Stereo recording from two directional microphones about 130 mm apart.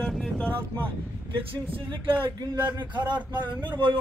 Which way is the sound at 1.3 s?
45° right (ahead or behind).